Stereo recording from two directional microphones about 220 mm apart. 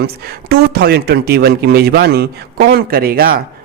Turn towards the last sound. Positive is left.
turn(degrees=-40)  # may be behind; listen again after turning